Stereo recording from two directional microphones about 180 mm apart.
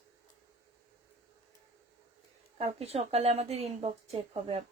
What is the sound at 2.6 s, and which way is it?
Speech, 35° right (ahead or behind).